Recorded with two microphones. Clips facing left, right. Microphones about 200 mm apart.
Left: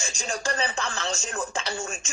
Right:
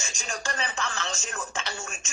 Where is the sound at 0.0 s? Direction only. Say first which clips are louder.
Left 4 dB; 35° left (ahead or behind).